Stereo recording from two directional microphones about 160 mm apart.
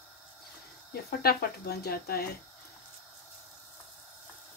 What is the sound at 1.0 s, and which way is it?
Speech, 85° left.